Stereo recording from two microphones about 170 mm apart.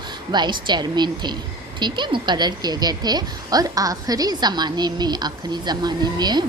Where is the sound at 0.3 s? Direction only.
25° right (ahead or behind).